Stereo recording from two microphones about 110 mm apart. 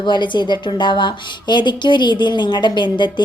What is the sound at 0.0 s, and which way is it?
A woman's voice, 45° left (ahead or behind).